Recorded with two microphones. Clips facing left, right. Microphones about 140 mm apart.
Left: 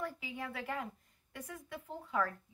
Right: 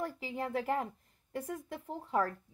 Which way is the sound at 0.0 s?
40° right (ahead or behind).